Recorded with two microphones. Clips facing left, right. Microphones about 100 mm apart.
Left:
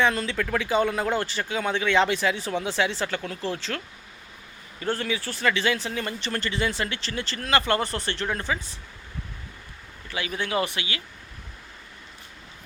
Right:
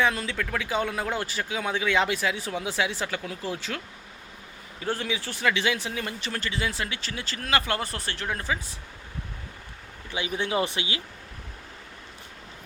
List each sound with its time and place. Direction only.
0.0 s speech: 5° right (ahead or behind)
4.8 s speech: 10° right (ahead or behind)
10.1 s speech: 20° right (ahead or behind)